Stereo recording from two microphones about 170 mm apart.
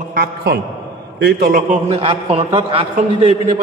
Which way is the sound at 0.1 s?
65° right (ahead or behind).